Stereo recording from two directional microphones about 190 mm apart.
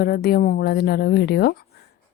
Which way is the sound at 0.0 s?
55° left (ahead or behind).